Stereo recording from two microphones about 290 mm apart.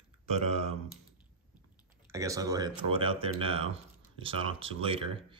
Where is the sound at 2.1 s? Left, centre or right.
Centre.